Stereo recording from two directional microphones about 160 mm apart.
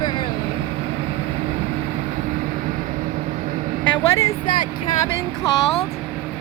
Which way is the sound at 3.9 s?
25° left (ahead or behind).